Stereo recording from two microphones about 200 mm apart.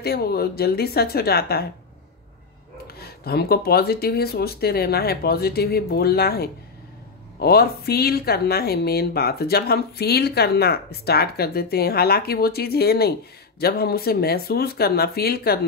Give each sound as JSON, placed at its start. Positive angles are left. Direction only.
{"t": 0.0, "sound": "speech", "side_deg": 50}
{"t": 3.0, "sound": "speech", "side_deg": 50}